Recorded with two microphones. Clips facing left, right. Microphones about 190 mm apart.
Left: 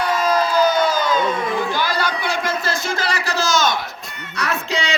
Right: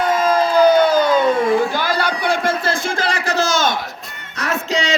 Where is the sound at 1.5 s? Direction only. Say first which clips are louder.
Right 5 dB; 45° right (ahead or behind).